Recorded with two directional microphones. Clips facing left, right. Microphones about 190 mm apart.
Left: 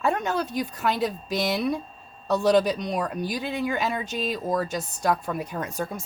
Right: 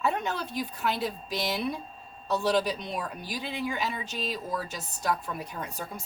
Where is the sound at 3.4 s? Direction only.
50° left (ahead or behind).